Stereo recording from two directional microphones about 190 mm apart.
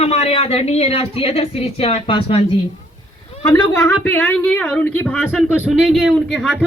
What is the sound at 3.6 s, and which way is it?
A man's voice, 10° left (ahead or behind).